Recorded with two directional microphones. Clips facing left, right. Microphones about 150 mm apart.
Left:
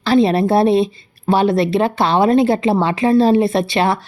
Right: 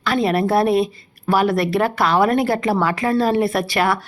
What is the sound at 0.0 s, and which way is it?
Speech, 25° left (ahead or behind).